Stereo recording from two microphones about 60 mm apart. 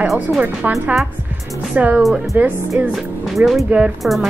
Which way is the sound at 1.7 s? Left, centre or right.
Right.